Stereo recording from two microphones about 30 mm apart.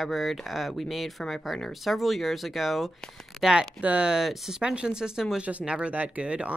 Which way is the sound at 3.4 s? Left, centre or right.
Centre.